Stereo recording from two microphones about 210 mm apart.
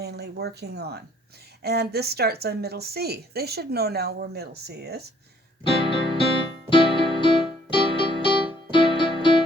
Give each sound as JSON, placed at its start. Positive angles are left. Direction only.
{"t": 0.0, "sound": "a sound", "side_deg": -50}
{"t": 1.6, "sound": "a woman's voice", "side_deg": -50}
{"t": 5.6, "sound": "music", "side_deg": 25}